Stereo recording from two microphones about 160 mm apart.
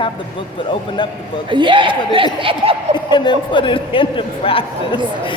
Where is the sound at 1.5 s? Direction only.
30° right (ahead or behind).